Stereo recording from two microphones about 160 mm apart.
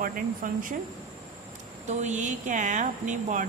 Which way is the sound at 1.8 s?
45° right (ahead or behind).